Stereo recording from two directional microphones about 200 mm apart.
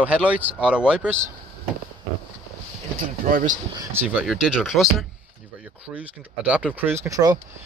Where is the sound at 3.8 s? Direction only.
10° right (ahead or behind).